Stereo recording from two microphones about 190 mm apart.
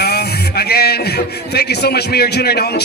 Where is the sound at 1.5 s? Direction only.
55° left (ahead or behind).